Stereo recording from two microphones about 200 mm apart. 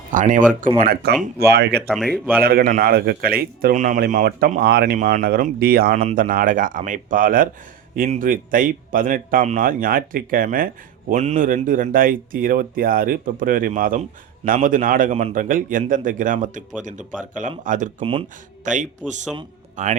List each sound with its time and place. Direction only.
0.1 s speech: 40° right (ahead or behind)
1.2 s speech: 55° right (ahead or behind)
1.9 s speech: centre (ahead or behind)
2.4 s a man's voice: 50° right (ahead or behind)
18.0 s speech: 25° right (ahead or behind)